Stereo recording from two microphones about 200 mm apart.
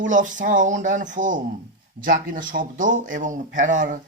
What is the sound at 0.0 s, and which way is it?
Speech, 40° right (ahead or behind).